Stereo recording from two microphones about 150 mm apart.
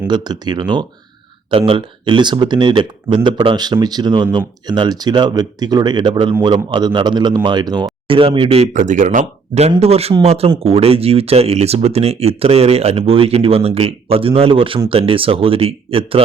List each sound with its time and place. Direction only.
0.1 s speech: 30° right (ahead or behind)